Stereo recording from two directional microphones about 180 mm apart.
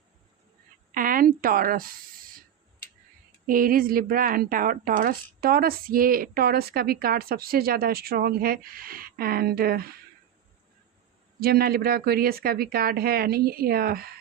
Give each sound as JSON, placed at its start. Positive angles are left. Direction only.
{"t": 0.9, "sound": "a woman's voice", "side_deg": -50}
{"t": 3.4, "sound": "speech", "side_deg": -50}
{"t": 11.3, "sound": "speech", "side_deg": -55}